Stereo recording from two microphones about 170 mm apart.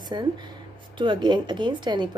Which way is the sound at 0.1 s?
25° right (ahead or behind).